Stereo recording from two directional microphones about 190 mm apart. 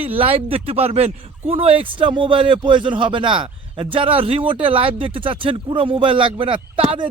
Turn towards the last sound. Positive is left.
turn(degrees=-30)  # may be behind; listen again after turning